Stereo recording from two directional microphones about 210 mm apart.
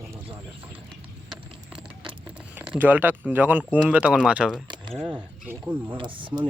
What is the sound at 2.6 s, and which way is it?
Speech, 10° right (ahead or behind).